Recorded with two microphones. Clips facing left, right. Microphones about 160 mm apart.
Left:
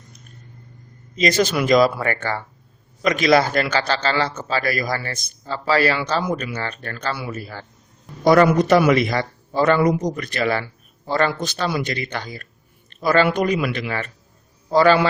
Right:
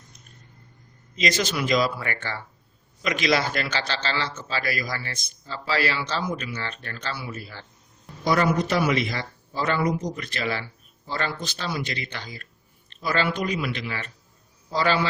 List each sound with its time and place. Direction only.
1.1 s a man's voice: 50° left (ahead or behind)
7.1 s a man's voice: 55° left (ahead or behind)
8.2 s speech: 60° left (ahead or behind)
10.1 s a man's voice: 50° left (ahead or behind)